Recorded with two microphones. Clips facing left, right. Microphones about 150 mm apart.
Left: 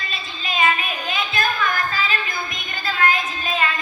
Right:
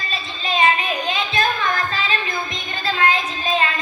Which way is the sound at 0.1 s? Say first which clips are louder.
Right 6 dB; 35° right (ahead or behind).